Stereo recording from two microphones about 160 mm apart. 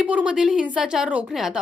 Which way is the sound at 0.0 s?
10° right (ahead or behind).